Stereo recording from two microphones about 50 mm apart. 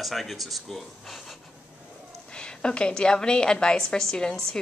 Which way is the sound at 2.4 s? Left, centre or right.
Centre.